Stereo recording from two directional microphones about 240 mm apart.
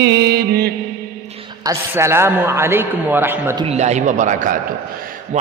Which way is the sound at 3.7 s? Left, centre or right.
Right.